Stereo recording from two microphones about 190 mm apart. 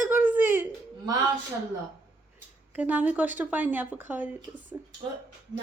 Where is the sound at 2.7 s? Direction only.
10° right (ahead or behind).